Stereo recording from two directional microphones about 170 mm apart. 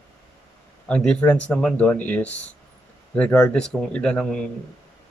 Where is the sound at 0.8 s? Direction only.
5° left (ahead or behind).